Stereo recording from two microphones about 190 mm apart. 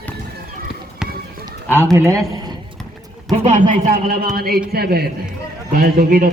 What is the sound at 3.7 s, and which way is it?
A man's voice, 45° right (ahead or behind).